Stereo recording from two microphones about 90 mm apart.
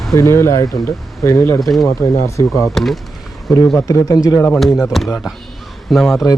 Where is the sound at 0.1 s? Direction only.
30° left (ahead or behind).